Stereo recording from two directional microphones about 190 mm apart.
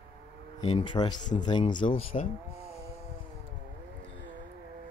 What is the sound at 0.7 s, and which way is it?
Speech, 25° left (ahead or behind).